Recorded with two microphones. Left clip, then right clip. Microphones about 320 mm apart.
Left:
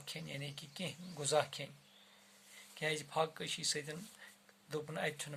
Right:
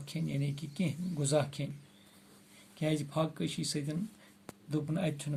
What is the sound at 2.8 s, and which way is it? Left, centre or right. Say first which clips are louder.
Speech: right 3 dB; centre.